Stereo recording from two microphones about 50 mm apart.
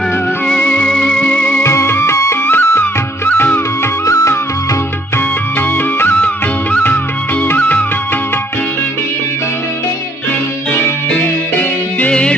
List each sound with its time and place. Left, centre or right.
0.6 s music: left
1.6 s music: left
2.1 s music: left
2.5 s music: left
3.2 s music of bollywood: left
4.0 s music: left
5.1 s music: left
6.1 s music: left